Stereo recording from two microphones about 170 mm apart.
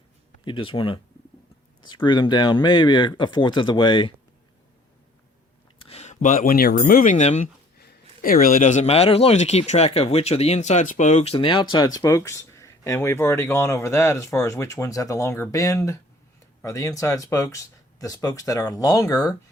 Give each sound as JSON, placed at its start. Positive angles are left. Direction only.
{"t": 0.4, "sound": "a man's voice", "side_deg": 30}
{"t": 5.8, "sound": "speech", "side_deg": 35}
{"t": 7.8, "sound": "a man's voice", "side_deg": 65}